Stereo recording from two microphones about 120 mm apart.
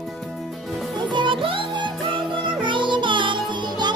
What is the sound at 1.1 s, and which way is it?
Music, 40° right (ahead or behind).